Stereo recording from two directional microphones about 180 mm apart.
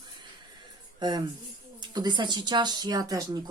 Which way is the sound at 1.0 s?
25° right (ahead or behind).